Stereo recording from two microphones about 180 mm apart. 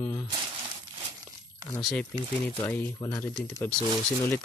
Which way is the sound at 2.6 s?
10° left (ahead or behind).